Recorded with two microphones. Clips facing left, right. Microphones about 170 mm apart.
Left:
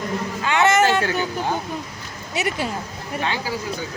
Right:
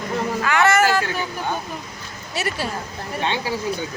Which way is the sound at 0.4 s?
25° left (ahead or behind).